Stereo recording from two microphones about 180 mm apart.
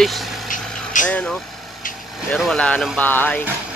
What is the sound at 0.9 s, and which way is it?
Speech, 45° left (ahead or behind).